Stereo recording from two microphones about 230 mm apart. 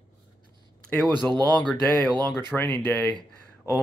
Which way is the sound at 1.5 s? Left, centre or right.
Centre.